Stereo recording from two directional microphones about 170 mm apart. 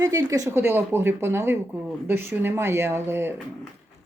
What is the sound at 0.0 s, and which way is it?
Speech, 20° right (ahead or behind).